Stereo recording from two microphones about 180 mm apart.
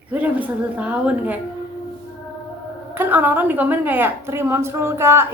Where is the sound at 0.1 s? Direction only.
10° right (ahead or behind).